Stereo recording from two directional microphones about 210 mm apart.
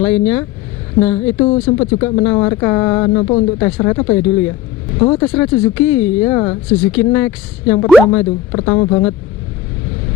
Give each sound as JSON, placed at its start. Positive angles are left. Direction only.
{"t": 0.0, "sound": "speech", "side_deg": 10}
{"t": 1.5, "sound": "speech", "side_deg": 30}
{"t": 2.0, "sound": "speech", "side_deg": 10}